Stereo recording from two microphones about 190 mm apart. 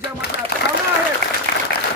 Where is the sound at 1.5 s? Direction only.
50° right (ahead or behind).